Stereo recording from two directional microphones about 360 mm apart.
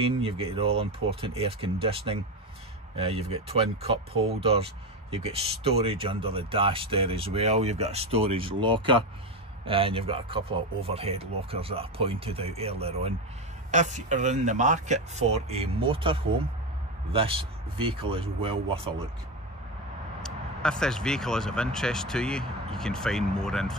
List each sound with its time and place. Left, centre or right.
0.0 s speech: centre
20.2 s speech: centre